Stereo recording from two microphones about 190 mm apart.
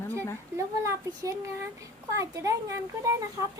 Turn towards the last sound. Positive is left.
turn(degrees=-15)  # may be behind; listen again after turning